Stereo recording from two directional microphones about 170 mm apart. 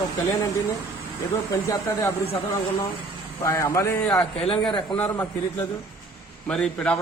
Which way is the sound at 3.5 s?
15° left (ahead or behind).